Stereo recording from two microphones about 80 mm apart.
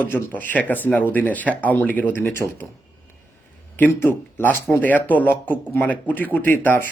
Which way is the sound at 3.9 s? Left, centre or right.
Left.